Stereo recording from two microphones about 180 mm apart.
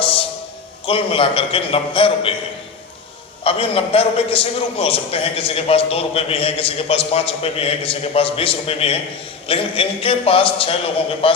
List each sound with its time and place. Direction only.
0.9 s a man's voice: 30° left (ahead or behind)
3.4 s a man's voice: 30° left (ahead or behind)